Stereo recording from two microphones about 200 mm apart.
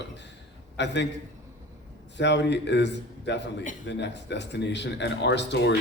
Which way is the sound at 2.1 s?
60° left (ahead or behind).